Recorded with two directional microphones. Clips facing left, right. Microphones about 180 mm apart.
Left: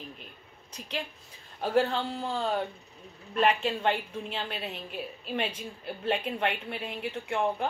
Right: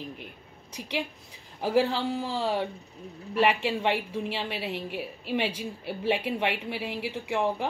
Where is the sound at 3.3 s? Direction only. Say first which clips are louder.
Right 1 dB; 75° right (ahead or behind).